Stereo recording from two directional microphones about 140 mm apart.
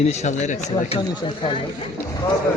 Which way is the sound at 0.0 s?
50° left (ahead or behind).